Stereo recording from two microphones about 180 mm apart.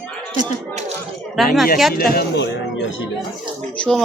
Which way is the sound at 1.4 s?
Centre (ahead or behind).